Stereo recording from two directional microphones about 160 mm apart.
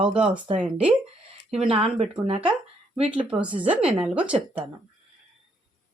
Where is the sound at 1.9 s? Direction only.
35° right (ahead or behind).